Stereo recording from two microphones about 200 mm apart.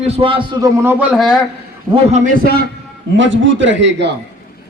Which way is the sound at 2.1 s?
40° right (ahead or behind).